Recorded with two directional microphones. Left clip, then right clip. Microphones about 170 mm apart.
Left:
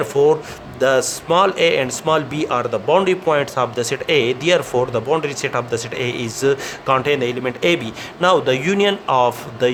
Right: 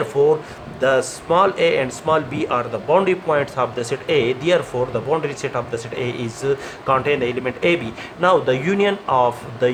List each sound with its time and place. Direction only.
0.0 s speech: 50° left (ahead or behind)